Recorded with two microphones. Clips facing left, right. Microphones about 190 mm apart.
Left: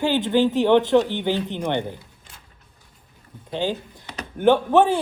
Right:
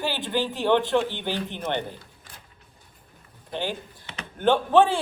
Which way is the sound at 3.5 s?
20° left (ahead or behind).